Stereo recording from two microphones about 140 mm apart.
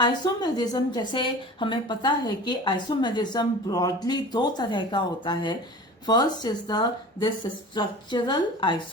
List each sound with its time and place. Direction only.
0.0 s a woman's voice: 30° left (ahead or behind)